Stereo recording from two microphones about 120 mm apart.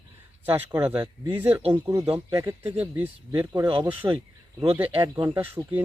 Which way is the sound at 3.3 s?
30° right (ahead or behind).